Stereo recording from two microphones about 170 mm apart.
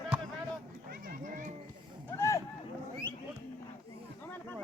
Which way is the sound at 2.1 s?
15° left (ahead or behind).